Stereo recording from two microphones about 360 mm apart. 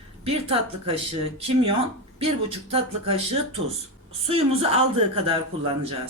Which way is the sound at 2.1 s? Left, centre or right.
Centre.